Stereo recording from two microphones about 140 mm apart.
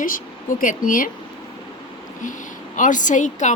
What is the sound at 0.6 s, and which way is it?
Speech, 75° left (ahead or behind).